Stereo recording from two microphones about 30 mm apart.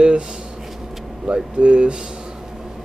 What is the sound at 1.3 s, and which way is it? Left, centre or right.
Speech, right.